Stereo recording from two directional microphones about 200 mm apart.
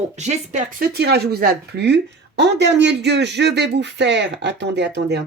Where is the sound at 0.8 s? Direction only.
55° right (ahead or behind).